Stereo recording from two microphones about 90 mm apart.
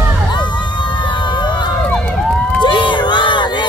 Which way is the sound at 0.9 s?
60° left (ahead or behind).